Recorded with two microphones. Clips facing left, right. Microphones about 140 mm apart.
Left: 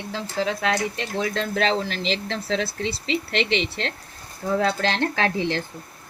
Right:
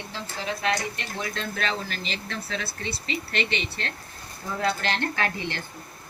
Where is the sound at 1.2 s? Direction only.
90° left.